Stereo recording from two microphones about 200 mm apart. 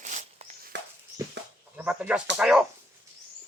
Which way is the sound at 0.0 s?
35° right (ahead or behind).